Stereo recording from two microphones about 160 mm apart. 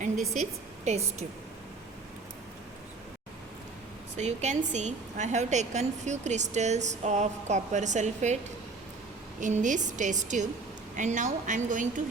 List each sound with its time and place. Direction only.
0.9 s a woman's voice: 45° right (ahead or behind)
4.2 s a woman's voice: 45° right (ahead or behind)
9.4 s a woman's voice: 50° right (ahead or behind)